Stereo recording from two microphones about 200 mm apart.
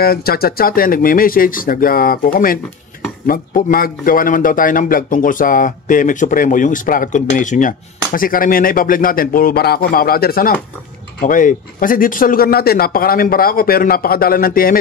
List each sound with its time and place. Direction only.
0.0 s a man's voice: 50° left (ahead or behind)